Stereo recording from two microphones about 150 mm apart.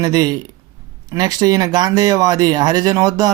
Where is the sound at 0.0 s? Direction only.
25° right (ahead or behind).